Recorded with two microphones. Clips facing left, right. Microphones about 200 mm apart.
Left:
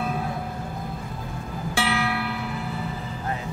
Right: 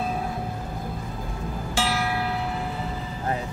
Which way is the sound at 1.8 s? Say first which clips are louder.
Even; 65° left (ahead or behind).